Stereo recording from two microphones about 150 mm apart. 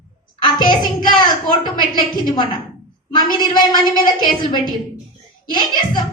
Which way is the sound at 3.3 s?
30° left (ahead or behind).